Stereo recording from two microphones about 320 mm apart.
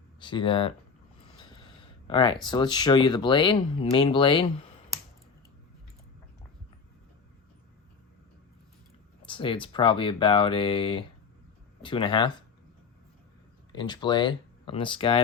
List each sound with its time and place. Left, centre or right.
0.2 s speech: centre
1.4 s a sound: centre
2.5 s speech: centre
9.2 s speech: centre
13.7 s speech: centre